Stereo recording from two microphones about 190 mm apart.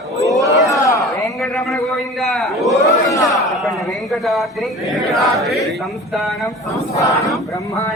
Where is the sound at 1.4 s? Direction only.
Centre (ahead or behind).